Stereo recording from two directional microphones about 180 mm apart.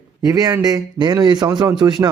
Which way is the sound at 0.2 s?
20° right (ahead or behind).